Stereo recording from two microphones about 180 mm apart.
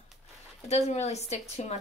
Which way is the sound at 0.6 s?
35° left (ahead or behind).